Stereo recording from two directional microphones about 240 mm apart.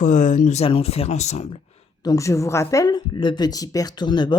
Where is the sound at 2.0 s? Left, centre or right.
Centre.